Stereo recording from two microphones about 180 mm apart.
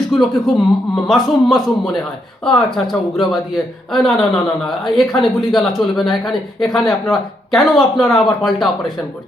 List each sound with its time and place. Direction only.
0.1 s speech: centre (ahead or behind)